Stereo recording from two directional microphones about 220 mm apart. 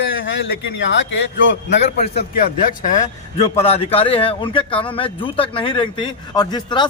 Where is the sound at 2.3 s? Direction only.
40° left (ahead or behind).